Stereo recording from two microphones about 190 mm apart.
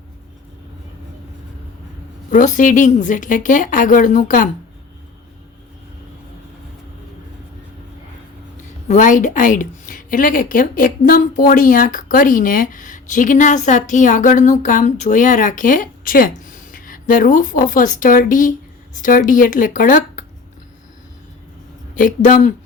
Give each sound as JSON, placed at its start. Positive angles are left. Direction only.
{"t": 2.3, "sound": "speech", "side_deg": 40}
{"t": 8.9, "sound": "speech", "side_deg": 40}
{"t": 21.9, "sound": "speech", "side_deg": 45}